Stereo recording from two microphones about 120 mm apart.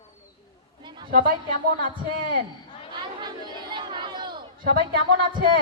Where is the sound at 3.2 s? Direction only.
40° right (ahead or behind).